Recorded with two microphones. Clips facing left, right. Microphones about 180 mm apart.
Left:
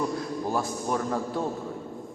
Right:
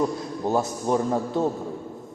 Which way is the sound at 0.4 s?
25° right (ahead or behind).